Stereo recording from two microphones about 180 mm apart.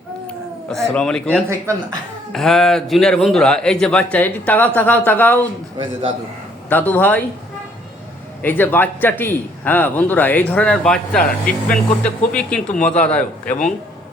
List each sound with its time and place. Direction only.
0.3 s speech: 5° left (ahead or behind)
1.5 s speech: 15° right (ahead or behind)
2.3 s a man's voice: centre (ahead or behind)
5.7 s a man's voice: 30° right (ahead or behind)
6.7 s a man's voice: 10° left (ahead or behind)
8.4 s a man's voice: 10° left (ahead or behind)
11.2 s speech: 55° left (ahead or behind)
12.3 s a man's voice: 5° left (ahead or behind)